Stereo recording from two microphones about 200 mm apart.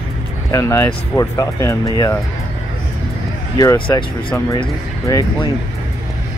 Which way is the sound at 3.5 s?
20° left (ahead or behind).